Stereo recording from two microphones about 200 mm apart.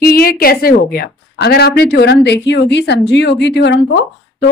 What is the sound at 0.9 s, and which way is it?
Speech, 50° left (ahead or behind).